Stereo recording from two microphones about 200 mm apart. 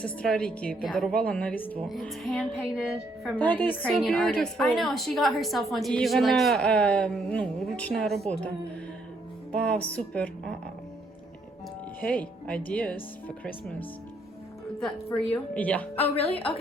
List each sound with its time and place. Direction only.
0.0 s a woman's voice: 5° left (ahead or behind)
11.9 s speech: 10° left (ahead or behind)
16.0 s a woman's voice: 30° left (ahead or behind)